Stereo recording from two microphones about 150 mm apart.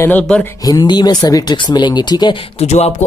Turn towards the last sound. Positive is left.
turn(degrees=50)  # may be behind; listen again after turning